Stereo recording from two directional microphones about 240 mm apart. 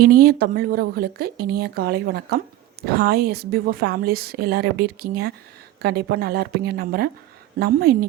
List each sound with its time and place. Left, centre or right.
0.0 s a woman's voice: right